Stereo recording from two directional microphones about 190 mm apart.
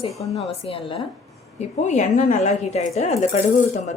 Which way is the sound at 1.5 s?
40° left (ahead or behind).